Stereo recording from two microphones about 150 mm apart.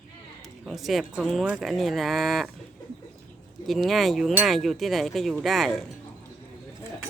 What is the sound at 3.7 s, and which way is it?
Speech, centre (ahead or behind).